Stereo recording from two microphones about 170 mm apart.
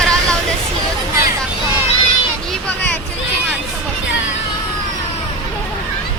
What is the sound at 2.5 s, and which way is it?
Vehicle, 10° left (ahead or behind).